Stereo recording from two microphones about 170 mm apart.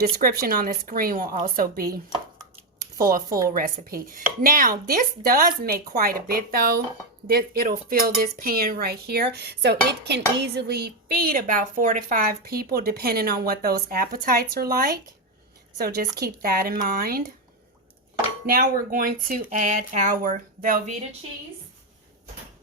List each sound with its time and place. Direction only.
0.0 s speech: 60° right (ahead or behind)
3.0 s speech: 60° right (ahead or behind)
3.2 s a woman's voice: 20° right (ahead or behind)
3.5 s speech: 55° right (ahead or behind)
18.5 s speech: 55° right (ahead or behind)